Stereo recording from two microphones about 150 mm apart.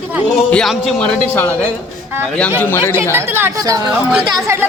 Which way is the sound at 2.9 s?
15° right (ahead or behind).